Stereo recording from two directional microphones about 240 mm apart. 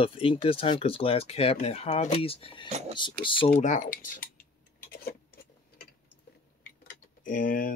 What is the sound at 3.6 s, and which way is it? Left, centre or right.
Mantra, left.